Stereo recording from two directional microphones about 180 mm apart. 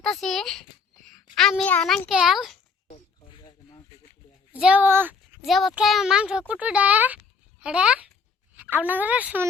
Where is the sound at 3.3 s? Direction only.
30° left (ahead or behind).